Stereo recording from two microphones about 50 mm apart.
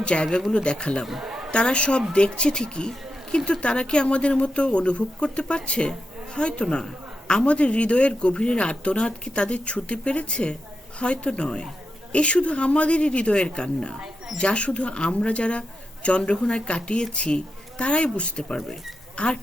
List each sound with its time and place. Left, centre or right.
0.0 s a woman's voice: left
1.2 s a sound: centre
1.5 s a woman's voice: centre